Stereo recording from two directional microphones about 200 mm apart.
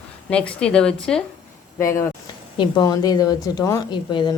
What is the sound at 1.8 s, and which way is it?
A woman's voice, 15° left (ahead or behind).